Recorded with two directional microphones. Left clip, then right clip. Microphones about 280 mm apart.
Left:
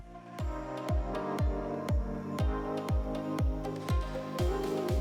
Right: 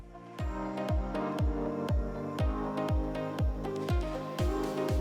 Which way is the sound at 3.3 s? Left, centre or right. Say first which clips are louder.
Right 1 dB; centre.